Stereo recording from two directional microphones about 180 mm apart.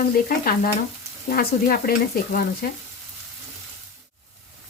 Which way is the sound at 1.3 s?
55° left (ahead or behind).